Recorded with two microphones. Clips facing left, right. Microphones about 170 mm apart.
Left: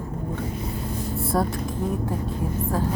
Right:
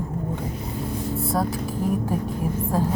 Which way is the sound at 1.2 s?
Centre (ahead or behind).